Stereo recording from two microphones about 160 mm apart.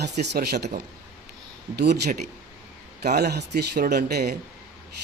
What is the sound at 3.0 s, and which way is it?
Speech, 80° right.